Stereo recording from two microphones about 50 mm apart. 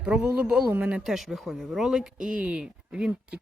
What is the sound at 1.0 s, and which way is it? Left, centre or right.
Speech, centre.